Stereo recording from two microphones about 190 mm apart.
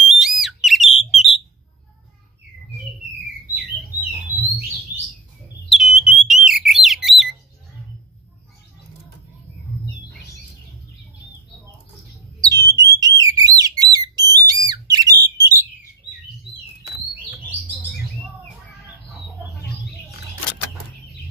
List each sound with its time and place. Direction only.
0.0 s a sound: centre (ahead or behind)
5.7 s alarm: centre (ahead or behind)
12.4 s alarm: 20° right (ahead or behind)
13.2 s whistle: 20° right (ahead or behind)